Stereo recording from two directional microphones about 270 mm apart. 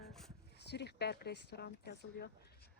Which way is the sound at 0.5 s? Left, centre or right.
Left.